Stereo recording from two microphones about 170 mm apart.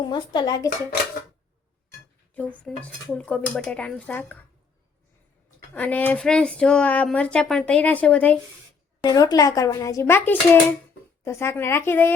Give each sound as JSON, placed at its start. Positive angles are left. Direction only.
{"t": 0.0, "sound": "a child's voice", "side_deg": 25}
{"t": 2.3, "sound": "a woman's voice", "side_deg": 10}
{"t": 5.7, "sound": "a woman's voice", "side_deg": 10}
{"t": 9.0, "sound": "a child's voice", "side_deg": 20}